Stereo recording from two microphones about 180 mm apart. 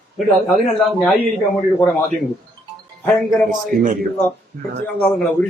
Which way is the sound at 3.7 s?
50° right (ahead or behind).